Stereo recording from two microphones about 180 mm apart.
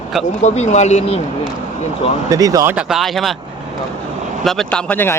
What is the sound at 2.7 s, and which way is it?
Speech, 5° right (ahead or behind).